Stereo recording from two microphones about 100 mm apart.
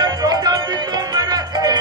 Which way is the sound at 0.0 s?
40° right (ahead or behind).